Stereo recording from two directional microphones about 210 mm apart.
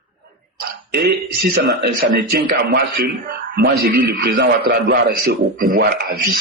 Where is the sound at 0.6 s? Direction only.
50° right (ahead or behind).